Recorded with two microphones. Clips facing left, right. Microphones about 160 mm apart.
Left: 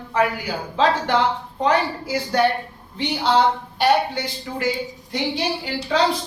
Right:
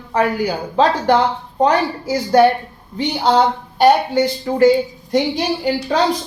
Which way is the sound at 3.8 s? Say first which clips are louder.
Right 7 dB; 45° right (ahead or behind).